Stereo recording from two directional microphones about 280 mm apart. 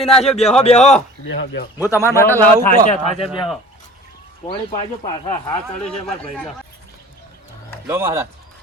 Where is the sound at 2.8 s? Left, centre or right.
Left.